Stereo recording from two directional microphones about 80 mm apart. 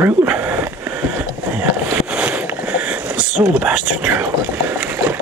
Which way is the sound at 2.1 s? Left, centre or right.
Centre.